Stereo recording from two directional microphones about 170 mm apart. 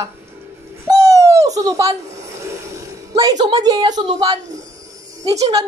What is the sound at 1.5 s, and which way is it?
A woman's voice, 20° right (ahead or behind).